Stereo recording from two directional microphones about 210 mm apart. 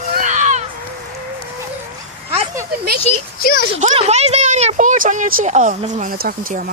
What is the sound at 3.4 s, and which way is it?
Speech, 45° left (ahead or behind).